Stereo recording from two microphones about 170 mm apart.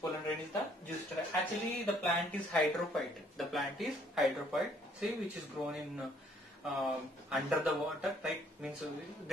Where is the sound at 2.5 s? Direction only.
Centre (ahead or behind).